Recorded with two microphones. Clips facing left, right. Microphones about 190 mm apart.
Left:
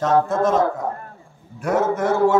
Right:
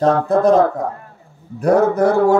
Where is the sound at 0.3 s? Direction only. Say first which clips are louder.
Right 6 dB; 35° right (ahead or behind).